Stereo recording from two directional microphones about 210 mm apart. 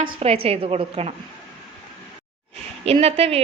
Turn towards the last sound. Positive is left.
turn(degrees=-30)  # may be behind; listen again after turning